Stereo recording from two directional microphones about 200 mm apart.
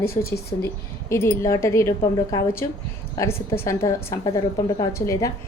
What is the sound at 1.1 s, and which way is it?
Speech, 15° left (ahead or behind).